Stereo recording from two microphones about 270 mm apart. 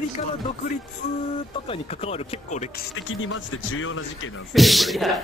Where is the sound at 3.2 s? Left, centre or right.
Left.